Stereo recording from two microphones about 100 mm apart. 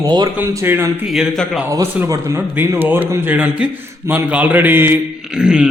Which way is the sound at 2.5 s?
20° right (ahead or behind).